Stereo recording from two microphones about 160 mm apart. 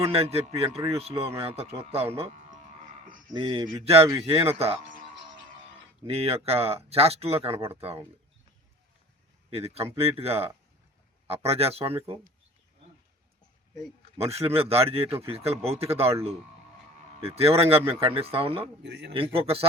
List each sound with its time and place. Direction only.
0.0 s speech: 40° right (ahead or behind)
3.4 s speech: 30° right (ahead or behind)
6.1 s speech: 40° right (ahead or behind)
9.5 s speech: 40° right (ahead or behind)
14.2 s speech: 40° right (ahead or behind)
17.2 s speech: 40° right (ahead or behind)
18.8 s a man's voice: 90° right
19.1 s speech: 35° right (ahead or behind)